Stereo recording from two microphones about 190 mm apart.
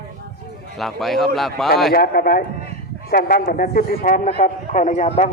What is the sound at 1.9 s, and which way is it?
A man's voice, 55° left (ahead or behind).